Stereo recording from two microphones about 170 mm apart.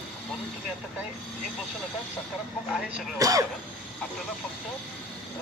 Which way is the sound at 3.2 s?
20° right (ahead or behind).